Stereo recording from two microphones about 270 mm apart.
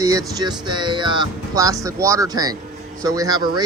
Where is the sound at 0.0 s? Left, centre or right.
Centre.